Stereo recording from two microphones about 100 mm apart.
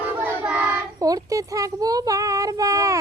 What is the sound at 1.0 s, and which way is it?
Speech, 35° right (ahead or behind).